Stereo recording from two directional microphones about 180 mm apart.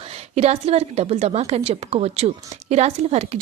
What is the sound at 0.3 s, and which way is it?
A woman's voice, 35° right (ahead or behind).